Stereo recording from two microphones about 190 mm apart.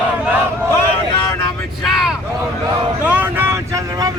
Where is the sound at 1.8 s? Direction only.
Centre (ahead or behind).